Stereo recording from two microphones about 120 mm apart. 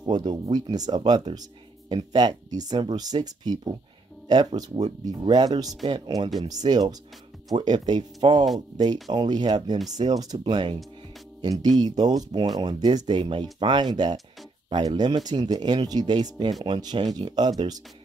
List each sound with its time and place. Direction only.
0.0 s speech: 35° right (ahead or behind)
4.6 s speech: 70° right (ahead or behind)
5.2 s speech: 35° right (ahead or behind)